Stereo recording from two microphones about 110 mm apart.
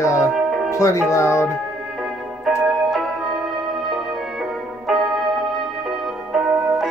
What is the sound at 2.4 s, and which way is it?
Music, centre (ahead or behind).